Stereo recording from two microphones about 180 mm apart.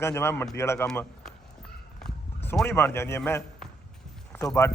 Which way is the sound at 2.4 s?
10° left (ahead or behind).